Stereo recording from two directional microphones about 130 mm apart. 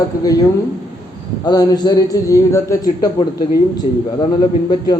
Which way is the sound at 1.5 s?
30° left (ahead or behind).